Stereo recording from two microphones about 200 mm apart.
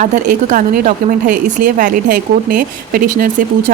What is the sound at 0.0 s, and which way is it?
A woman's voice, 40° right (ahead or behind).